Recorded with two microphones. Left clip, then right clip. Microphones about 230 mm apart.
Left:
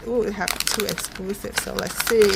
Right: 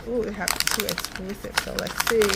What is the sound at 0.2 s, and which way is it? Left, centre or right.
Speech, left.